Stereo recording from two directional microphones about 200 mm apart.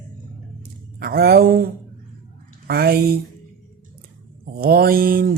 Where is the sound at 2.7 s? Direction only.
50° right (ahead or behind).